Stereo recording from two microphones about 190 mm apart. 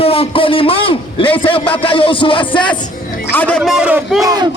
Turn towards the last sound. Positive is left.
turn(degrees=-20)  # may be behind; listen again after turning